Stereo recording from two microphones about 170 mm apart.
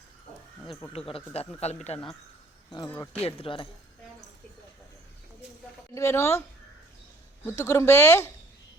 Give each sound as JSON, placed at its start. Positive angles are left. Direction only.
{"t": 0.9, "sound": "speech", "side_deg": 35}
{"t": 3.2, "sound": "speech", "side_deg": 35}
{"t": 5.9, "sound": "speech", "side_deg": 15}
{"t": 7.4, "sound": "speech", "side_deg": 15}